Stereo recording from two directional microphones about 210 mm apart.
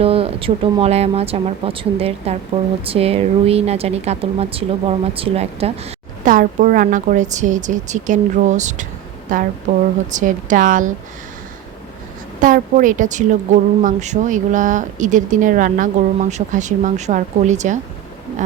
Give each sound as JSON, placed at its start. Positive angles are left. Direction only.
{"t": 0.0, "sound": "speech", "side_deg": -25}
{"t": 12.4, "sound": "speech", "side_deg": -40}